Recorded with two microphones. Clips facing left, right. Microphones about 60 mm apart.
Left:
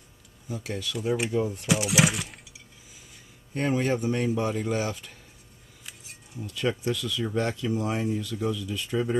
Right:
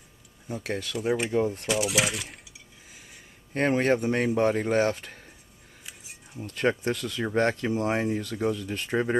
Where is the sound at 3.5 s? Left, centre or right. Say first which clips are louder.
Right 3 dB; right.